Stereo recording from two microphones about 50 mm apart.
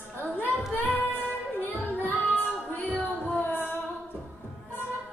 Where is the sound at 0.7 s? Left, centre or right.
Left.